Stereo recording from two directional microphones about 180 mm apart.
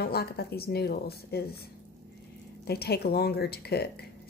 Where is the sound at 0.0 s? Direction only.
60° left (ahead or behind).